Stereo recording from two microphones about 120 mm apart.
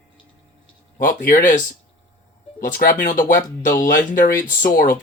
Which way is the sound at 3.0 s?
90° left.